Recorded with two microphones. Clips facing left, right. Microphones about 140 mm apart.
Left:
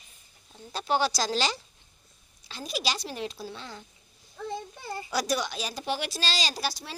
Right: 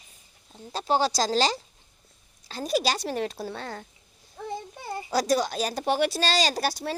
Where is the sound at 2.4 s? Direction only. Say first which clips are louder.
Right 7 dB; 50° right (ahead or behind).